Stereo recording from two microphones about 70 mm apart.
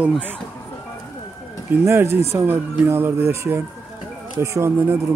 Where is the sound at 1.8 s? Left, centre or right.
Right.